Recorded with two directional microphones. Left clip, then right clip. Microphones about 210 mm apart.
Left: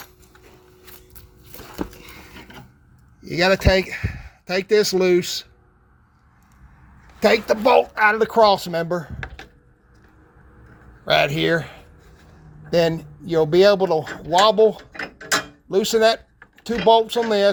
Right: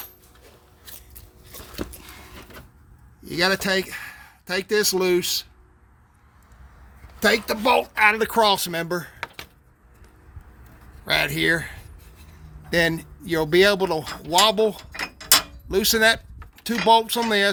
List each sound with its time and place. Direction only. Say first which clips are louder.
3.2 s speech: left 4 dB; 5° right (ahead or behind)
7.2 s speech: left 4 dB; 5° right (ahead or behind)
11.0 s speech: left 3 dB; 5° right (ahead or behind)